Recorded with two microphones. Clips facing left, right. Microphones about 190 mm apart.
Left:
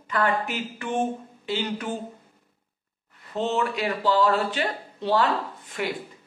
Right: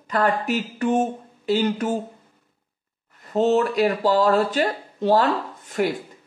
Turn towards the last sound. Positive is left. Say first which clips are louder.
# right 7 dB
turn(degrees=-45)  # may be behind; listen again after turning